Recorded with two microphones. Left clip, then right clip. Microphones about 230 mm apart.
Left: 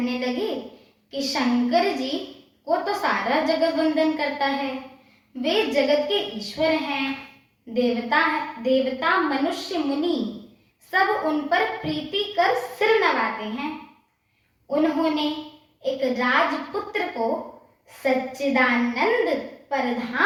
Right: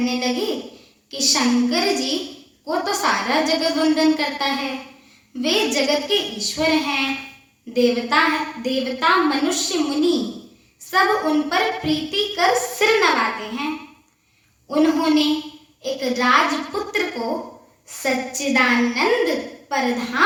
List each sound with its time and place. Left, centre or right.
0.0 s a woman's voice: right
14.7 s a woman's voice: right